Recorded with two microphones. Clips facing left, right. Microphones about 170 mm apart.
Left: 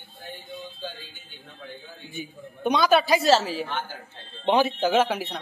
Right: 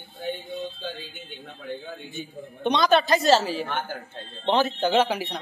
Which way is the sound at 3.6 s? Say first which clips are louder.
Right 2 dB; 55° right (ahead or behind).